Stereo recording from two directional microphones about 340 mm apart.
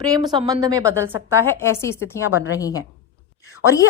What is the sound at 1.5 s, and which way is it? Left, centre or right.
Speech, centre.